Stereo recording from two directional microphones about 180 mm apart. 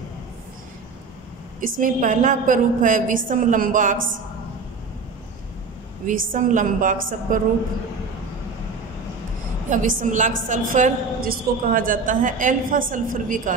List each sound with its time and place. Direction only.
1.6 s a woman's voice: 45° right (ahead or behind)
6.0 s a woman's voice: 45° right (ahead or behind)
9.7 s a woman's voice: 45° right (ahead or behind)